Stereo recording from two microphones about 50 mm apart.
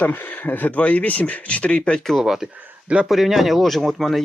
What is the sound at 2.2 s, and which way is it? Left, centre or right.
Speech, centre.